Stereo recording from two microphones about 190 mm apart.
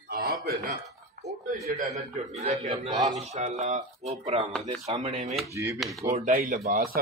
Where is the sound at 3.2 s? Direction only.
35° right (ahead or behind).